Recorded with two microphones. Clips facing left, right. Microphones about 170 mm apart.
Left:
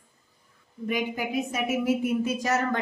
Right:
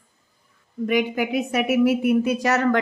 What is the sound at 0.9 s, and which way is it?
A woman's voice, 70° right (ahead or behind).